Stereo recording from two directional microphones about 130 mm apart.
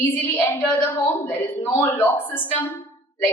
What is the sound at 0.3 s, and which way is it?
A man's voice, 15° left (ahead or behind).